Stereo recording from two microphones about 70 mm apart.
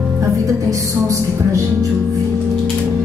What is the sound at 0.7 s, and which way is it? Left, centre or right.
Music, right.